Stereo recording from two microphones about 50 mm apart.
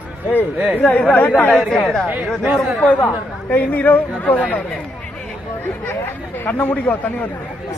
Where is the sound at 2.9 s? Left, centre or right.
Left.